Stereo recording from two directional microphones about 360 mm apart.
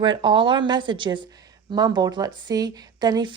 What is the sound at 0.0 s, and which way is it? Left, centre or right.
Speech, centre.